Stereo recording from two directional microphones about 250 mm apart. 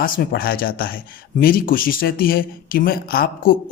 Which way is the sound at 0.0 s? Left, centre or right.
Left.